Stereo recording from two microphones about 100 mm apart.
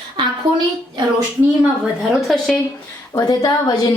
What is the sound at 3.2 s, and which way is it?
Speech, 40° left (ahead or behind).